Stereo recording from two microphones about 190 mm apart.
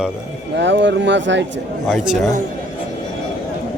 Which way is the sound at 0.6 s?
70° right (ahead or behind).